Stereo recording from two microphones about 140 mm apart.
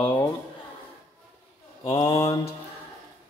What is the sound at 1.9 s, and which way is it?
Mantra, 35° left (ahead or behind).